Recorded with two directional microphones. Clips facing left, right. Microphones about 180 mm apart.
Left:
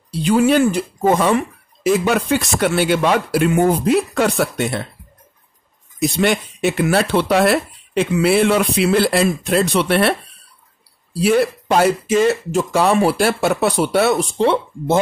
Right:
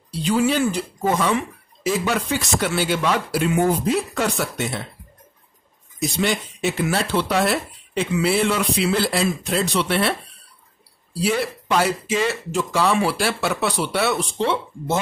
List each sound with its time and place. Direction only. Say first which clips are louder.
0.2 s speech: left 5 dB; 55° left (ahead or behind)
5.9 s speech: left 5 dB; 60° left (ahead or behind)
11.6 s speech: left 5 dB; 50° left (ahead or behind)